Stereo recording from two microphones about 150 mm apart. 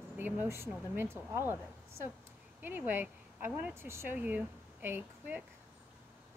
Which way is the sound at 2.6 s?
15° right (ahead or behind).